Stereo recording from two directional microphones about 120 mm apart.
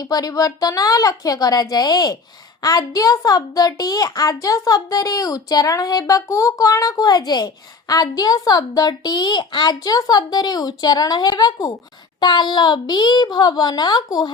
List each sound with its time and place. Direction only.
0.0 s a woman's voice: 30° left (ahead or behind)